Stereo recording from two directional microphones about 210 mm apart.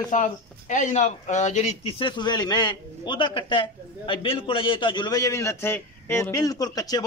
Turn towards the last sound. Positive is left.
turn(degrees=15)  # may be behind; listen again after turning